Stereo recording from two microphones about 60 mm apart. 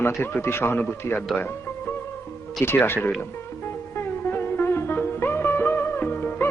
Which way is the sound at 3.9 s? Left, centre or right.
Left.